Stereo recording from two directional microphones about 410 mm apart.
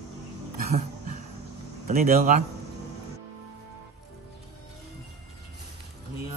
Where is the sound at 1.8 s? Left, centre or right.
Centre.